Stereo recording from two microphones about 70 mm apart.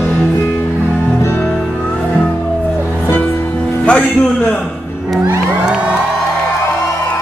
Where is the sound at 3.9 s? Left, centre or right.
Left.